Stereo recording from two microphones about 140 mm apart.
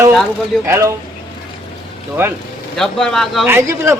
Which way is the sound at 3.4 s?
15° right (ahead or behind).